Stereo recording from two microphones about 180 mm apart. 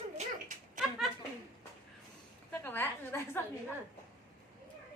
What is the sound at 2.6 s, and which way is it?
Speech, 10° left (ahead or behind).